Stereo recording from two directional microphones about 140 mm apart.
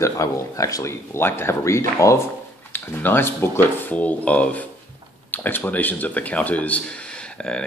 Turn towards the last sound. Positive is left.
turn(degrees=5)  # may be behind; listen again after turning